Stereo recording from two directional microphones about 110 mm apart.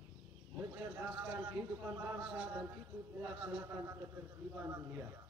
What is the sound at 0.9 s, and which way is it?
A man's voice, 20° right (ahead or behind).